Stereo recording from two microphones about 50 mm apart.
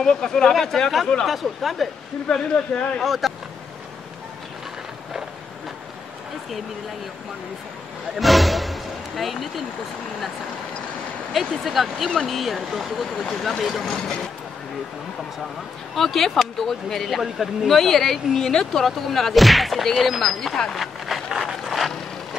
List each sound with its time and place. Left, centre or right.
0.0 s speech: centre
1.2 s speech: centre
2.5 s speech: left
3.0 s speech: centre
8.2 s speech: centre
11.3 s speech: centre
13.9 s speech: centre
15.9 s speech: centre
20.7 s a sound: centre